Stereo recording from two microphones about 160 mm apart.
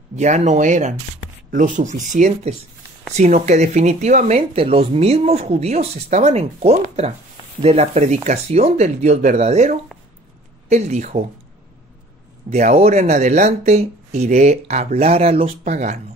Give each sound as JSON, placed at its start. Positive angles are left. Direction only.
{"t": 0.1, "sound": "speech", "side_deg": -45}
{"t": 12.4, "sound": "speech", "side_deg": -45}